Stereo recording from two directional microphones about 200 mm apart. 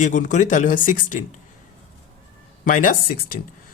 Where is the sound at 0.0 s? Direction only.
40° left (ahead or behind).